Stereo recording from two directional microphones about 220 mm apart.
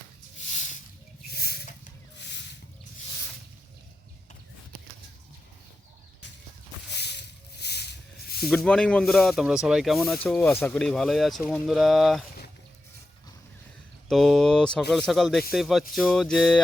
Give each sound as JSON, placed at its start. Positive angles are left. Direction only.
{"t": 1.4, "sound": "snake", "side_deg": 45}
{"t": 6.9, "sound": "snake", "side_deg": 50}
{"t": 8.4, "sound": "speech", "side_deg": 5}
{"t": 14.1, "sound": "speech", "side_deg": 0}